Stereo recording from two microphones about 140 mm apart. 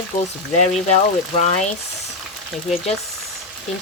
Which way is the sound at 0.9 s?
55° left (ahead or behind).